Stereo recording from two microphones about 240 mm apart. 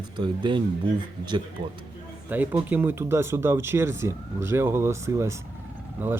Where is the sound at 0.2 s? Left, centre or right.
Centre.